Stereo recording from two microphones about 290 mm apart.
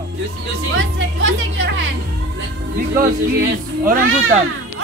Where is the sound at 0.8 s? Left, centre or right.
Right.